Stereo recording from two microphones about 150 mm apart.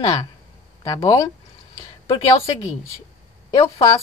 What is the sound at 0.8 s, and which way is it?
A woman's voice, 25° left (ahead or behind).